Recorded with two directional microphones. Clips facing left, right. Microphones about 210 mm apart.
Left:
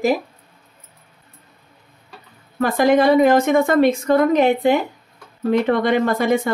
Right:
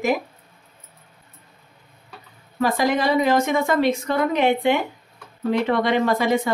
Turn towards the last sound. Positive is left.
turn(degrees=45)  # may be behind; listen again after turning